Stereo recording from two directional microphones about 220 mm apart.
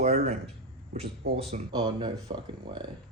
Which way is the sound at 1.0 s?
45° right (ahead or behind).